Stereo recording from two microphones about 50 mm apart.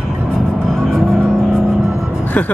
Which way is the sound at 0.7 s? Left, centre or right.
Centre.